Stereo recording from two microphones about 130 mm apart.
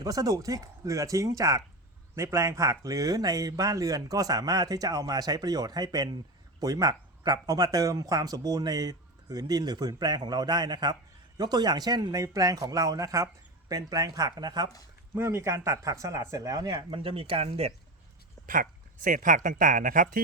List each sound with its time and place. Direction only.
0.0 s speech: 25° right (ahead or behind)
15.1 s speech: 20° right (ahead or behind); by 17.7 s 50° right (ahead or behind)
18.4 s speech: 90° right